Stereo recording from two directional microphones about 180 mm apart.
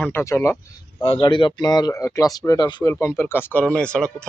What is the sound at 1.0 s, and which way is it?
Speech, 30° left (ahead or behind).